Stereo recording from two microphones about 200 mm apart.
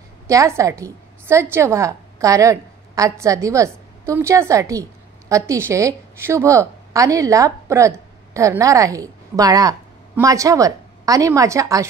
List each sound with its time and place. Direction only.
0.3 s a woman's voice: 15° right (ahead or behind)